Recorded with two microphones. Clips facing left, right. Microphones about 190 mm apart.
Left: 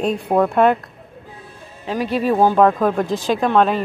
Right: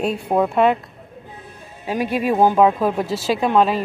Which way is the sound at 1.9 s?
10° right (ahead or behind).